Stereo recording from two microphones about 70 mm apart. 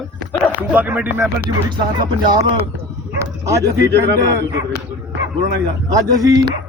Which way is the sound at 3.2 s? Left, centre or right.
Right.